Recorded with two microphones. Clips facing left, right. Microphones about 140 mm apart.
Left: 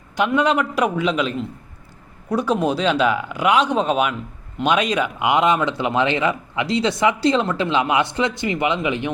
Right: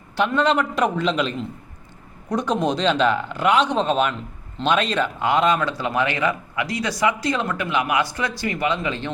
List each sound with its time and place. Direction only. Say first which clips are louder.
0.2 s speech: left 1 dB; 10° left (ahead or behind)